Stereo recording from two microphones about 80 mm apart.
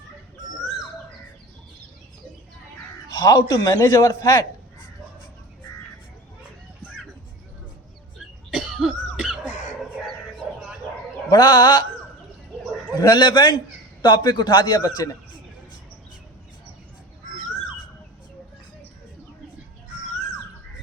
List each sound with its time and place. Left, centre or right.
3.1 s speech: left
8.4 s cough: centre
9.1 s a sound: centre
11.3 s speech: left
12.9 s a man's voice: left
14.8 s speech: left